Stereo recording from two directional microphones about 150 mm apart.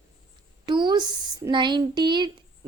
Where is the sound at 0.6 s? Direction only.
30° right (ahead or behind).